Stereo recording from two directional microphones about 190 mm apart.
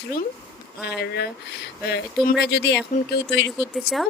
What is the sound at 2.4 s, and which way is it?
Speech, 65° left (ahead or behind).